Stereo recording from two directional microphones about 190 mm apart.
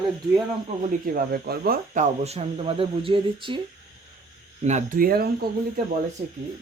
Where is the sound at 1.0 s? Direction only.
50° right (ahead or behind).